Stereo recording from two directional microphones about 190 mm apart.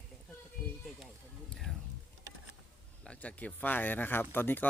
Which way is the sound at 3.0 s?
5° left (ahead or behind).